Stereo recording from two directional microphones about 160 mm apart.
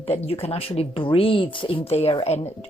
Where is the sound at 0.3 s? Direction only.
40° left (ahead or behind).